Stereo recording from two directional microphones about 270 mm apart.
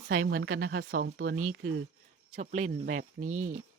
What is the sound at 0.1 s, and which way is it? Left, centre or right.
Speech, right.